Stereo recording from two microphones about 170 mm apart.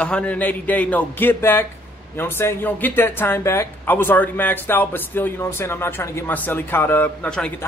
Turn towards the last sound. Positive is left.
turn(degrees=5)  # may be behind; listen again after turning